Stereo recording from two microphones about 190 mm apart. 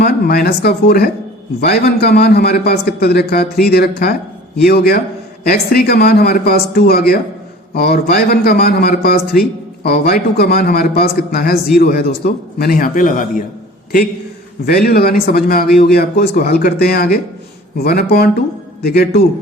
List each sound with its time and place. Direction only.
0.0 s a man's voice: 55° left (ahead or behind)
14.7 s a man's voice: 50° left (ahead or behind)